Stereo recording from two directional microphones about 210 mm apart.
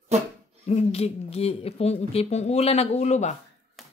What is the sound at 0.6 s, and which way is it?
Speech, 30° left (ahead or behind).